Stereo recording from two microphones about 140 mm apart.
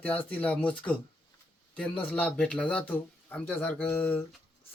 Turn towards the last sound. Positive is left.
turn(degrees=15)  # may be behind; listen again after turning